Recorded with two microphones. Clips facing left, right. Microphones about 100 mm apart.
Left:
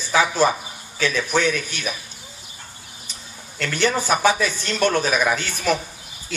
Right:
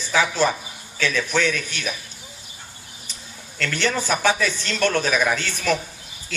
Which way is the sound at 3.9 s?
15° left (ahead or behind).